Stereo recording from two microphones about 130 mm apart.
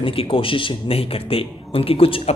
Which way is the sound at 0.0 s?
45° left (ahead or behind).